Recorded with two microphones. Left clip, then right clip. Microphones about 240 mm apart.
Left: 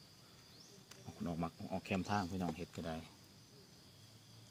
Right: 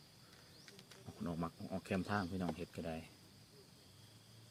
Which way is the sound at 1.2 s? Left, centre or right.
Centre.